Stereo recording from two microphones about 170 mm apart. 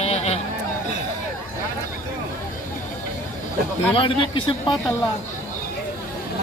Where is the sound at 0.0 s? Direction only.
40° left (ahead or behind).